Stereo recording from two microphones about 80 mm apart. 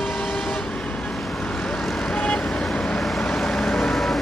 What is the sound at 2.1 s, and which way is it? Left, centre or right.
Vehicle, centre.